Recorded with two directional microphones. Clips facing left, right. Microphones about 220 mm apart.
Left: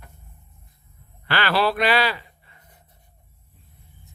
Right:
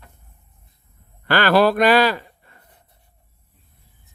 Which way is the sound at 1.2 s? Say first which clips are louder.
Right 6 dB; 45° right (ahead or behind).